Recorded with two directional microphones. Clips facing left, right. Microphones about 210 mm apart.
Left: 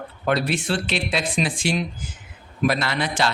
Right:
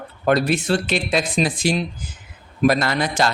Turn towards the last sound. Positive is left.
turn(degrees=-40)  # may be behind; listen again after turning